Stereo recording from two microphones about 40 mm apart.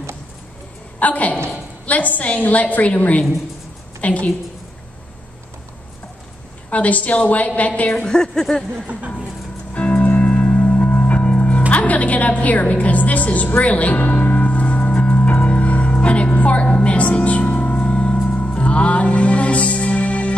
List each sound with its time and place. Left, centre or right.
0.9 s a woman's voice: left
6.7 s a woman's voice: left
8.0 s a woman's voice: centre
9.8 s music: left
11.7 s a woman's voice: left
14.9 s music: left